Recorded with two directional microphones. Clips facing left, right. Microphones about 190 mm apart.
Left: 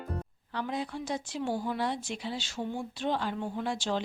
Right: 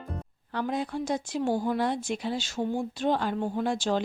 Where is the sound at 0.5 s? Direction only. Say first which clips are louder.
Right 4 dB; 45° right (ahead or behind).